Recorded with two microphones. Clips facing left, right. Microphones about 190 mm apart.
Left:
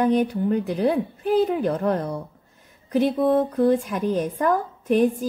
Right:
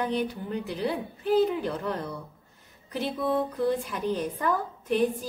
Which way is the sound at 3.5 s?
50° left (ahead or behind).